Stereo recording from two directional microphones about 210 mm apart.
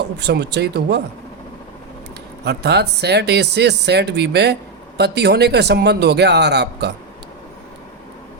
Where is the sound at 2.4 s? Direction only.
55° right (ahead or behind).